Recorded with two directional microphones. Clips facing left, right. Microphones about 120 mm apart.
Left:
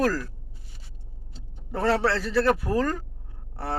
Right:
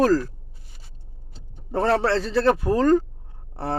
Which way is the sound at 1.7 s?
25° right (ahead or behind).